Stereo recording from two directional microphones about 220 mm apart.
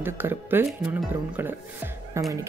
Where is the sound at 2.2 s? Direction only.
15° right (ahead or behind).